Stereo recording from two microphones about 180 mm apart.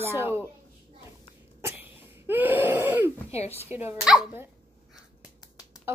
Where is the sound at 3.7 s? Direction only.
10° right (ahead or behind).